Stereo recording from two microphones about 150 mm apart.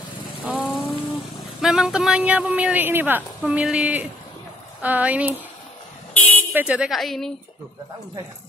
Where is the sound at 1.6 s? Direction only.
5° right (ahead or behind).